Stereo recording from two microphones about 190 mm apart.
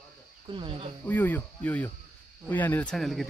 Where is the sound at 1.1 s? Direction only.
10° left (ahead or behind).